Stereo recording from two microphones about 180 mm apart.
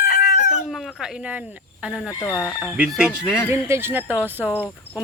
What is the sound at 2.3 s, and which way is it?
Speech, 5° left (ahead or behind).